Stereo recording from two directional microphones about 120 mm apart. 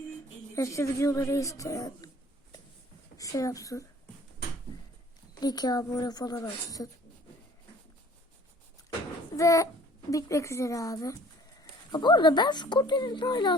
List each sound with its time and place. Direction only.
0.5 s a woman's voice: 25° left (ahead or behind)
3.2 s a woman's voice: 30° left (ahead or behind)
5.3 s speech: 35° left (ahead or behind)
9.3 s a child's voice: 25° left (ahead or behind)
11.9 s speech: 40° left (ahead or behind)